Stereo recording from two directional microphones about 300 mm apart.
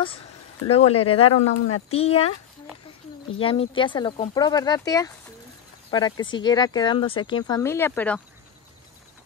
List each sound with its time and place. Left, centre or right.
0.7 s speech: centre
1.3 s speech: left
2.0 s speech: centre
3.3 s speech: centre